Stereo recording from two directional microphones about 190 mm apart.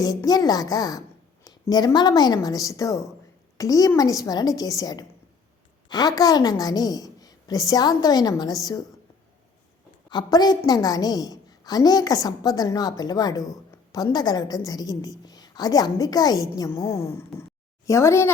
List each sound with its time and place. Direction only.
0.0 s a woman's voice: 20° left (ahead or behind)
10.1 s a woman's voice: 20° left (ahead or behind)